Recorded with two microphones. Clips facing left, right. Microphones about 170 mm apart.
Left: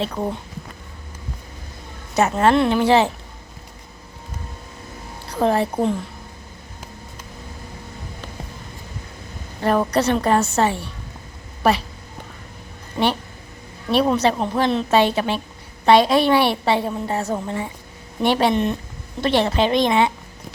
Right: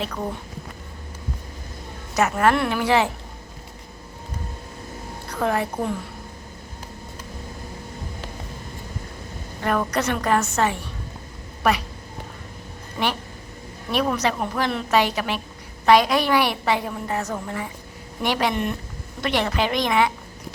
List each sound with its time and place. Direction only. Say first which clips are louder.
2.1 s a woman's voice: left 3 dB; 25° left (ahead or behind)
5.3 s a woman's voice: left 5 dB; 30° left (ahead or behind)
9.6 s a woman's voice: left 5 dB; 30° left (ahead or behind)
13.0 s a woman's voice: left 5 dB; 25° left (ahead or behind)